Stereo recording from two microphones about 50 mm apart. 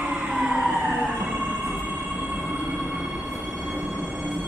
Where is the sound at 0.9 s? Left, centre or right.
Right.